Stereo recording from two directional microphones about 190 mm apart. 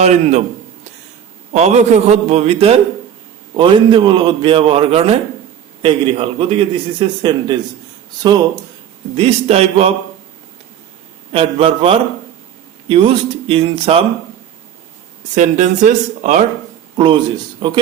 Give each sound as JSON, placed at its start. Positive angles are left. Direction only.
{"t": 0.0, "sound": "a man's voice", "side_deg": -35}
{"t": 1.5, "sound": "a man's voice", "side_deg": -35}
{"t": 9.1, "sound": "a man's voice", "side_deg": -30}
{"t": 11.3, "sound": "a man's voice", "side_deg": -30}
{"t": 15.4, "sound": "a man's voice", "side_deg": -40}
{"t": 17.0, "sound": "a man's voice", "side_deg": -25}